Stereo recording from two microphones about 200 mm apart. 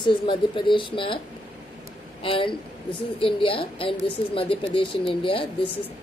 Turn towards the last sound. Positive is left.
turn(degrees=25)  # may be behind; listen again after turning